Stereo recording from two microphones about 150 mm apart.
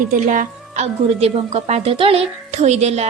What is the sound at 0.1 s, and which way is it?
Speech, 60° right (ahead or behind).